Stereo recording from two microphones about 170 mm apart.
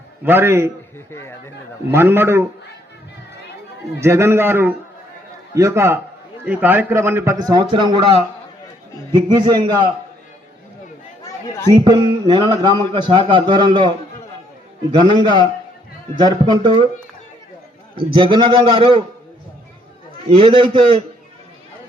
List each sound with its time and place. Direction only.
0.3 s a man's voice: 15° right (ahead or behind)
0.9 s speech: 15° left (ahead or behind)
1.9 s a man's voice: 15° right (ahead or behind)
4.0 s a man's voice: 15° right (ahead or behind)
7.6 s a man's voice: 25° right (ahead or behind)
9.1 s a man's voice: 25° right (ahead or behind)
11.9 s a man's voice: 25° right (ahead or behind)
14.9 s a man's voice: 25° right (ahead or behind)
17.9 s a man's voice: 30° right (ahead or behind)
20.3 s a man's voice: 30° right (ahead or behind)